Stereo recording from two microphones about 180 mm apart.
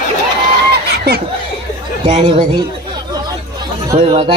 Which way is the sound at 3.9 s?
30° right (ahead or behind).